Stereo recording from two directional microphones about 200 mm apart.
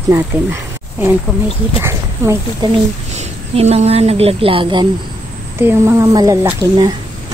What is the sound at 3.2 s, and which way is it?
A woman's voice, 30° right (ahead or behind).